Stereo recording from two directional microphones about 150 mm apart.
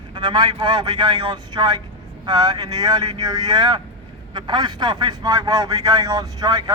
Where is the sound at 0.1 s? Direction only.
30° right (ahead or behind).